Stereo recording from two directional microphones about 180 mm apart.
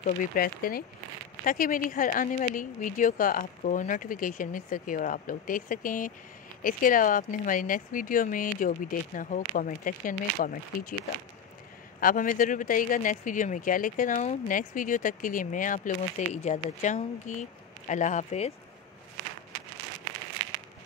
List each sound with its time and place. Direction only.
0.0 s speech: 50° left (ahead or behind)
12.0 s speech: 50° left (ahead or behind)